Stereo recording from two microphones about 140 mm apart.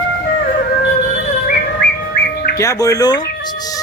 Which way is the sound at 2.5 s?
25° left (ahead or behind).